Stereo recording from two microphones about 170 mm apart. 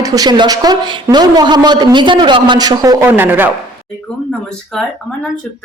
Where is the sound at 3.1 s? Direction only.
10° right (ahead or behind).